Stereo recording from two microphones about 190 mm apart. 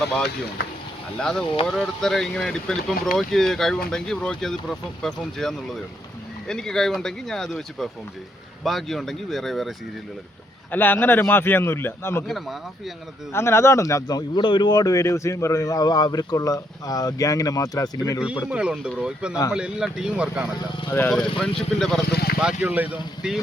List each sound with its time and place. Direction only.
1.2 s speech: 5° left (ahead or behind)
13.3 s speech: 15° left (ahead or behind)
18.4 s speech: 5° right (ahead or behind)
20.9 s speech: 5° left (ahead or behind)
22.0 s speech: 55° left (ahead or behind)
22.6 s speech: 10° right (ahead or behind)